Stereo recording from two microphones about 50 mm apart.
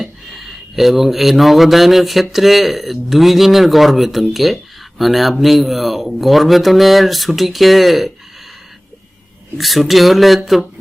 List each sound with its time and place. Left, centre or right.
0.0 s speech: centre
9.6 s speech: centre